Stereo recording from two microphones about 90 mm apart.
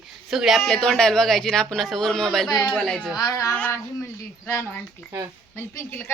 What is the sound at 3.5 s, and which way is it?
Speech, 20° left (ahead or behind).